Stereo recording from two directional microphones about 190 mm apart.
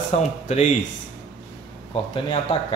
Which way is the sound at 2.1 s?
30° left (ahead or behind).